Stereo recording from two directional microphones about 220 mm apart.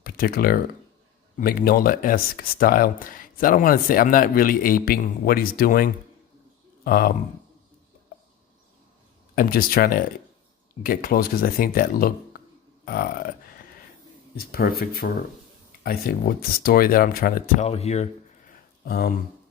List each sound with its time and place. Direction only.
0.0 s speech: 40° left (ahead or behind)
9.3 s speech: 40° left (ahead or behind)
14.3 s speech: 45° left (ahead or behind)
18.9 s speech: 45° left (ahead or behind)